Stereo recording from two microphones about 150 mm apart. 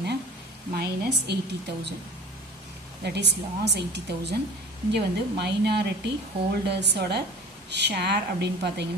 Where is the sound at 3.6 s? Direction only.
90° right.